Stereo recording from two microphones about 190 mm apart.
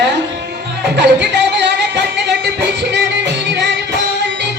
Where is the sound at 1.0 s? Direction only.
65° right (ahead or behind).